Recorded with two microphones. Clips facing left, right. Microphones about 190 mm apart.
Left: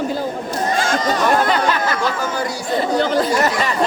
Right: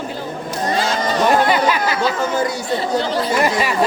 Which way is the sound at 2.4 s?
20° right (ahead or behind).